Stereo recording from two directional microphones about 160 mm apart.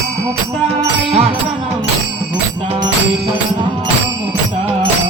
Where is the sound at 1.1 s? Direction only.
40° right (ahead or behind).